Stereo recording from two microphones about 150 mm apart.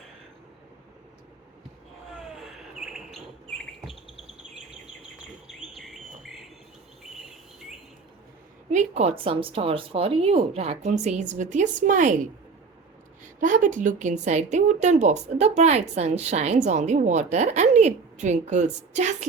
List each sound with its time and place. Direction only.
2.3 s bird: 5° right (ahead or behind)
5.5 s bird: centre (ahead or behind)
8.7 s a woman's voice: 50° right (ahead or behind)
13.4 s a woman's voice: 60° right (ahead or behind)